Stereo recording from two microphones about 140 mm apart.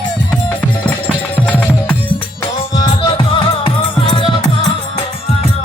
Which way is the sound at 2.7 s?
30° left (ahead or behind).